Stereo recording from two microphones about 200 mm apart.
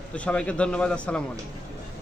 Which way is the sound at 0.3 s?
5° left (ahead or behind).